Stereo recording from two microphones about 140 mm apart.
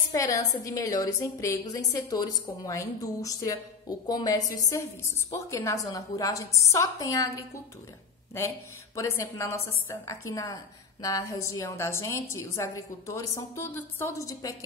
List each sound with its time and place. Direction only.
0.1 s a woman's voice: 25° left (ahead or behind)
8.9 s a woman's voice: 20° left (ahead or behind)